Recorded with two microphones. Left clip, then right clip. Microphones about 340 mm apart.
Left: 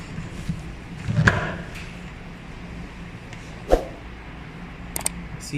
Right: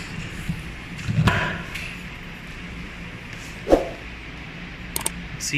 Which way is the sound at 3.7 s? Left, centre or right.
Centre.